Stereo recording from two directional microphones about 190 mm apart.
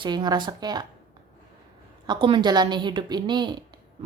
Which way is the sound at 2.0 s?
25° right (ahead or behind).